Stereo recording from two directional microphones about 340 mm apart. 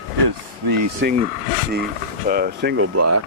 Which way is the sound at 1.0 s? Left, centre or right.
Right.